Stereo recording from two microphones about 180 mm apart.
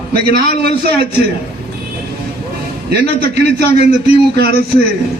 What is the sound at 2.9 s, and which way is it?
Speech, 65° right (ahead or behind).